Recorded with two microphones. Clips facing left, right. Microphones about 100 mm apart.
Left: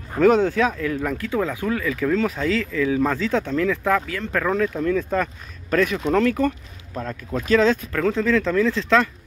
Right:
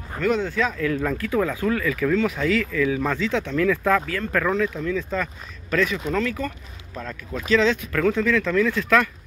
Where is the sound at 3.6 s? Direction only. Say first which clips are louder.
Right 3 dB; 20° left (ahead or behind).